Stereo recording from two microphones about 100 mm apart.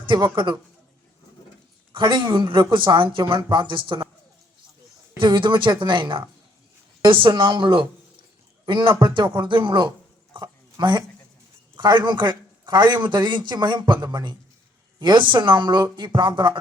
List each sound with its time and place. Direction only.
0.0 s a man's voice: 50° right (ahead or behind)
1.9 s a man's voice: 55° right (ahead or behind)
5.2 s a man's voice: 55° right (ahead or behind)
10.3 s a sound: 50° right (ahead or behind)
11.8 s a man's voice: 50° right (ahead or behind)